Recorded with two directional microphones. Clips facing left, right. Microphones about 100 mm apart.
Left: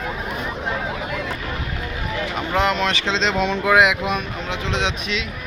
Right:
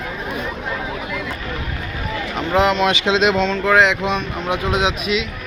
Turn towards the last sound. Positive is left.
turn(degrees=-5)  # may be behind; listen again after turning